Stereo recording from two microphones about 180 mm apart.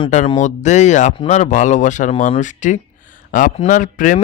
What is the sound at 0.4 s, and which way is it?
Speech, 40° left (ahead or behind).